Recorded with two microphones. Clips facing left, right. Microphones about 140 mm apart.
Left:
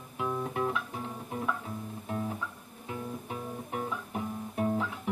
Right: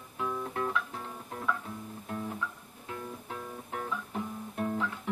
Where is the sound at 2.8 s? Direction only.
10° left (ahead or behind).